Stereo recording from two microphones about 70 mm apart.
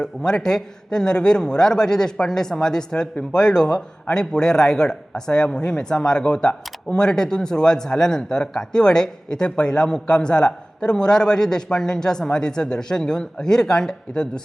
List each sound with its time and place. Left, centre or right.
0.0 s a man's voice: centre